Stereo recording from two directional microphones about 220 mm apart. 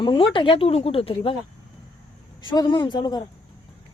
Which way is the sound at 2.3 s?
15° left (ahead or behind).